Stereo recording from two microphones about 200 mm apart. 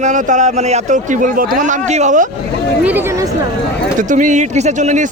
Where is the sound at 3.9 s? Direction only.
40° right (ahead or behind).